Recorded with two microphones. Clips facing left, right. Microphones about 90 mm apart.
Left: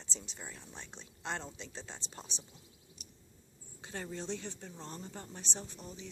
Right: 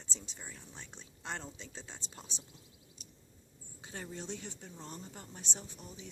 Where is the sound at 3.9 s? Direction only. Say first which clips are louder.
Left 3 dB; 10° right (ahead or behind).